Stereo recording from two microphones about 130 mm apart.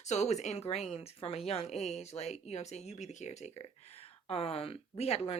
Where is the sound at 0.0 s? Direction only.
60° left (ahead or behind).